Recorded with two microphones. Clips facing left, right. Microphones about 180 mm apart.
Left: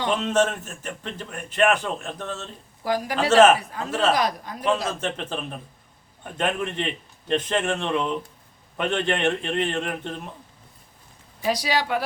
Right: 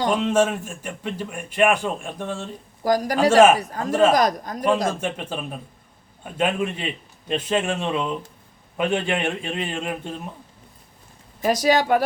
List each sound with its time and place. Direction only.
0.1 s a man's voice: 10° right (ahead or behind)
2.8 s speech: 40° right (ahead or behind)
3.2 s a man's voice: 10° right (ahead or behind)
3.6 s speech: 40° right (ahead or behind)
3.8 s a man's voice: 10° right (ahead or behind)
4.1 s speech: 45° right (ahead or behind)
4.9 s a man's voice: 10° right (ahead or behind)
11.4 s speech: 45° right (ahead or behind)